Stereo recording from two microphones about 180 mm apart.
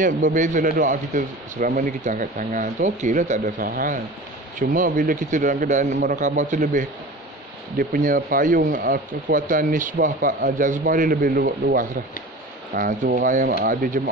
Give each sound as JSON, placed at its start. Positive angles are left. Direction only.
{"t": 0.0, "sound": "speech", "side_deg": -45}